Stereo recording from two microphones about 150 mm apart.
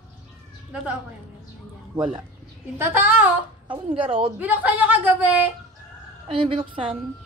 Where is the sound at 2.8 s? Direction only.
15° right (ahead or behind).